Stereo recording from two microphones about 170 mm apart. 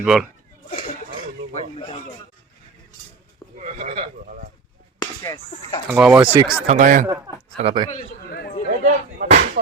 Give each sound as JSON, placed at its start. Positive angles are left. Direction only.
{"t": 0.0, "sound": "speech", "side_deg": 0}
{"t": 1.5, "sound": "speech", "side_deg": 35}
{"t": 3.6, "sound": "sheep", "side_deg": -45}
{"t": 4.9, "sound": "speech", "side_deg": 20}
{"t": 5.9, "sound": "speech", "side_deg": -5}
{"t": 6.7, "sound": "speech", "side_deg": -50}
{"t": 7.5, "sound": "speech", "side_deg": -30}
{"t": 7.9, "sound": "chatter", "side_deg": 55}
{"t": 8.8, "sound": "speech", "side_deg": -50}